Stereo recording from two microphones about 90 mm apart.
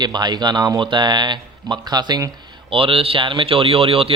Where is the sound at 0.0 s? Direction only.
55° right (ahead or behind).